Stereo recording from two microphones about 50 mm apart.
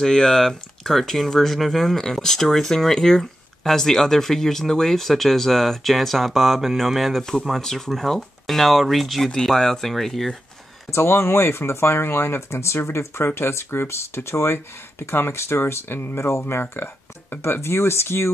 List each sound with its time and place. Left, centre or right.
0.0 s speech: centre
10.9 s speech: left